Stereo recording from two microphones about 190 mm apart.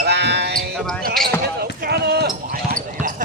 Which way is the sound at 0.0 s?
60° right (ahead or behind).